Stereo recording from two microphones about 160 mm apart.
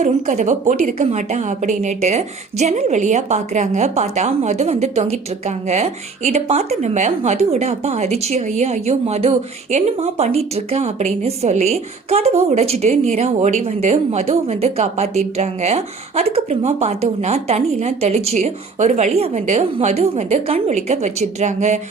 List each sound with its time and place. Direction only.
0.0 s a woman's voice: 50° right (ahead or behind)